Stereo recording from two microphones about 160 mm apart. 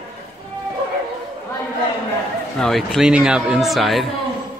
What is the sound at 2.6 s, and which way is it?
Speech, centre (ahead or behind).